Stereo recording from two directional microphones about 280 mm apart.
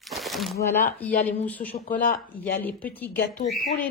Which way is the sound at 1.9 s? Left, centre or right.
Left.